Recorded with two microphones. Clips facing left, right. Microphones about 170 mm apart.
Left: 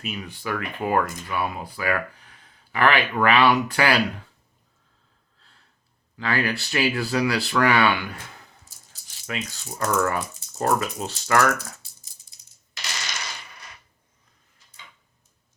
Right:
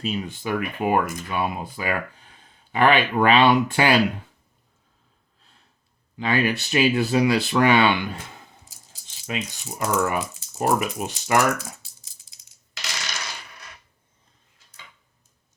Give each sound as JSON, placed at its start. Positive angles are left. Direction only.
{"t": 0.0, "sound": "speech", "side_deg": -30}
{"t": 5.4, "sound": "a sound", "side_deg": -20}
{"t": 6.1, "sound": "speech", "side_deg": -20}
{"t": 12.3, "sound": "coin", "side_deg": -90}